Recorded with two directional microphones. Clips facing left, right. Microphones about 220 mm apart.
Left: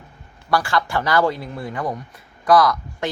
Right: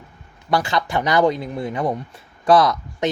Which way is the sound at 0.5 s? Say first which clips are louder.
Even; 20° right (ahead or behind).